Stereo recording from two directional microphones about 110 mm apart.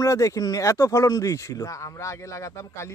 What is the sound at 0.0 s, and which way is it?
Speech, 30° left (ahead or behind).